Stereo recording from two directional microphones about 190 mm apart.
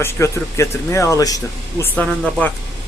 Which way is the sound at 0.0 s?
15° left (ahead or behind).